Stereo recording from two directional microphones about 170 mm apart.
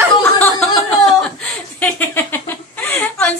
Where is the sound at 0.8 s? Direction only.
Centre (ahead or behind).